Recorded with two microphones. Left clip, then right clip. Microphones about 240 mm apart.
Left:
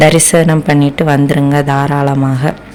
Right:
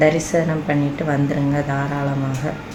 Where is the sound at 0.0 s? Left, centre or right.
Left.